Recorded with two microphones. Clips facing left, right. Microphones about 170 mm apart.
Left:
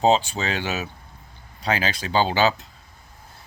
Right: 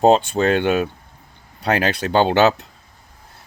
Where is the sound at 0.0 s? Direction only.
55° right (ahead or behind).